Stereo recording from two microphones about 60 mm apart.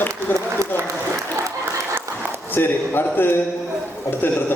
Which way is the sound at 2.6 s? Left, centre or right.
Left.